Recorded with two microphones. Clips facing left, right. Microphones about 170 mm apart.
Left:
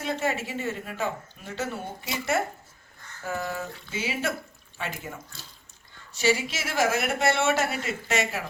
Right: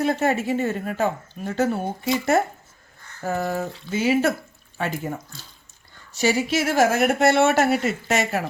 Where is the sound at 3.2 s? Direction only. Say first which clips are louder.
Right 7 dB; 45° right (ahead or behind).